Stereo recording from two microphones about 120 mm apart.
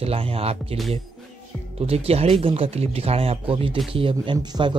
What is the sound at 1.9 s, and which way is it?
Speech, 55° right (ahead or behind).